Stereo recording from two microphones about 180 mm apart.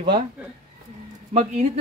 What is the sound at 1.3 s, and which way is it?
Speech, 40° right (ahead or behind).